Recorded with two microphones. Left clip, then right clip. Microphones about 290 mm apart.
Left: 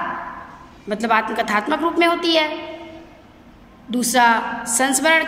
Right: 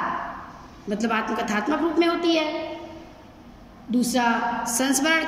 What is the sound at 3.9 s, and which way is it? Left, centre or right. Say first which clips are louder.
A woman's voice: left 7 dB; centre.